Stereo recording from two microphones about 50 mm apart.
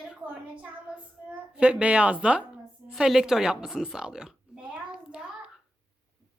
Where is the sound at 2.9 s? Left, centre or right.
Centre.